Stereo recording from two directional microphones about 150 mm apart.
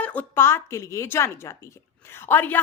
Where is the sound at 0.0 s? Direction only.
10° left (ahead or behind).